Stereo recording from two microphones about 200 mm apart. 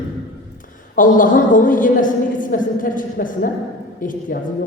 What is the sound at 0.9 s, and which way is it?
A man's voice, 40° left (ahead or behind).